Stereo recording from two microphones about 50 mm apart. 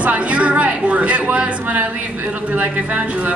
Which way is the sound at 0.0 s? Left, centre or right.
Right.